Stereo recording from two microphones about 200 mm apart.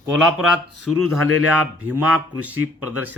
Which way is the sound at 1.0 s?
90° right.